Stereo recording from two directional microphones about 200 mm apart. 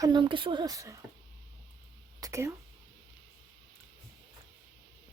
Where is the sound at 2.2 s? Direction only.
15° right (ahead or behind).